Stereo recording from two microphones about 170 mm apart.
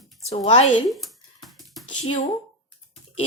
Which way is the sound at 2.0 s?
45° left (ahead or behind).